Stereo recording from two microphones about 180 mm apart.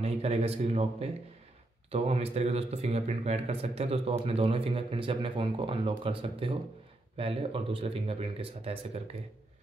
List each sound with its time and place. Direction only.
0.0 s speech: 35° right (ahead or behind)